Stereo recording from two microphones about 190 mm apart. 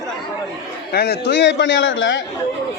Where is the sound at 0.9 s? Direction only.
60° left (ahead or behind); by 2.2 s 75° left (ahead or behind).